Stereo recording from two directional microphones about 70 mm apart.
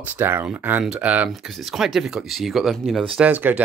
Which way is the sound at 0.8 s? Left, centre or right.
Centre.